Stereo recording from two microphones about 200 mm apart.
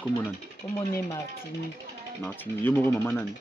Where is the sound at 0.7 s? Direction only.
20° left (ahead or behind).